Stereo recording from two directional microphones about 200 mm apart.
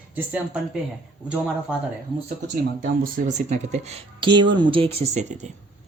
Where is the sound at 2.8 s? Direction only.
40° right (ahead or behind).